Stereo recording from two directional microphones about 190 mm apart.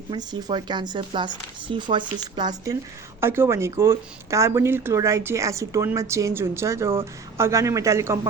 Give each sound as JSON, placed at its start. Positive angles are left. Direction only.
{"t": 0.1, "sound": "speech", "side_deg": -20}